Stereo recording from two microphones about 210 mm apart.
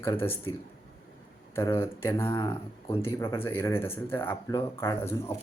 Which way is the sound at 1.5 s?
10° left (ahead or behind).